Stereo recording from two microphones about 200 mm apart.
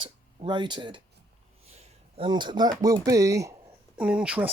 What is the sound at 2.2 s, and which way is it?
Speech, 25° right (ahead or behind).